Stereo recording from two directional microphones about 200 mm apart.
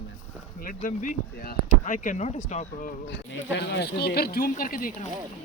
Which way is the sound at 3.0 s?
60° left (ahead or behind).